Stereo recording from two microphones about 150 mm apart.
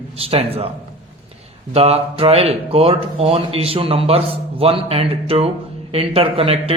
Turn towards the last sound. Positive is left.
turn(degrees=-40)  # may be behind; listen again after turning